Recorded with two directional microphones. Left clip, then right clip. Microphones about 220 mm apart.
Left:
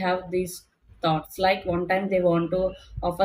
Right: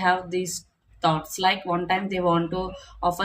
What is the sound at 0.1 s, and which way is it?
Speech, 25° right (ahead or behind).